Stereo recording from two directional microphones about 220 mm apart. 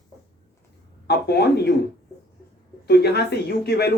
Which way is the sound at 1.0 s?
50° left (ahead or behind).